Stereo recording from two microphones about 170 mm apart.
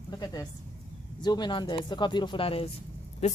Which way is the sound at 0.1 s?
25° left (ahead or behind).